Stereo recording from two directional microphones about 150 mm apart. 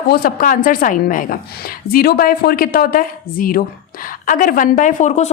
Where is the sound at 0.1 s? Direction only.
80° left.